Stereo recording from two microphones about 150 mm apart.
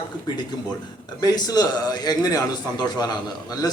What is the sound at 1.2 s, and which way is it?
A man's voice, 25° left (ahead or behind).